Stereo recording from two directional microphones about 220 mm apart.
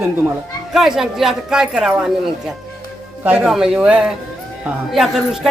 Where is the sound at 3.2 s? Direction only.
5° right (ahead or behind).